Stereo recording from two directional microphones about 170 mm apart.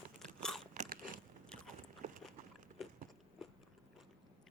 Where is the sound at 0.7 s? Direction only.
55° right (ahead or behind).